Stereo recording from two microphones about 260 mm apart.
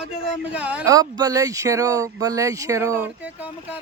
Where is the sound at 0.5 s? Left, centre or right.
Centre.